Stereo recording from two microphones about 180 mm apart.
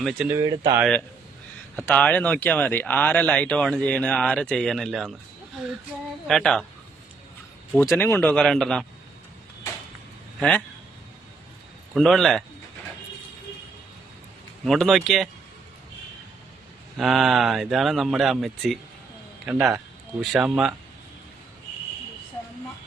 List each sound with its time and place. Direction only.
0.0 s speech: centre (ahead or behind)
0.3 s speech: 20° right (ahead or behind)
1.7 s speech: 10° left (ahead or behind)
6.2 s speech: centre (ahead or behind)
7.7 s speech: 10° left (ahead or behind)
11.9 s speech: centre (ahead or behind)
14.6 s speech: centre (ahead or behind)
17.0 s speech: centre (ahead or behind)